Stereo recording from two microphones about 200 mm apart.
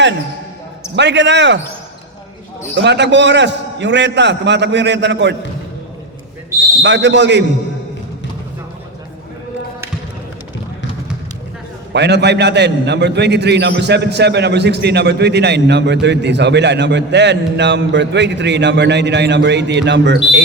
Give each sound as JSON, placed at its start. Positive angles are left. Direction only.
{"t": 0.9, "sound": "a man's voice", "side_deg": -60}
{"t": 2.7, "sound": "a man's voice", "side_deg": -60}
{"t": 6.8, "sound": "a man's voice", "side_deg": -65}
{"t": 11.9, "sound": "a man's voice", "side_deg": -60}